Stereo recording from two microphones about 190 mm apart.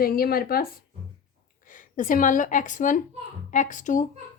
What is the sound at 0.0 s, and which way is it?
A woman's voice, 55° left (ahead or behind).